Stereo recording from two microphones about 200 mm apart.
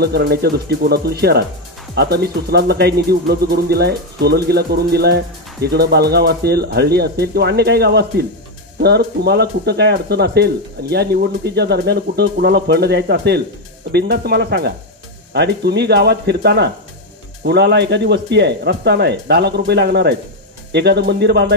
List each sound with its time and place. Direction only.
0.0 s speech: 55° right (ahead or behind)